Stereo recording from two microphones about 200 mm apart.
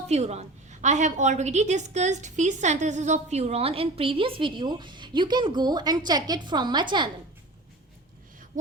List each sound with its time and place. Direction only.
0.1 s a woman's voice: 35° right (ahead or behind)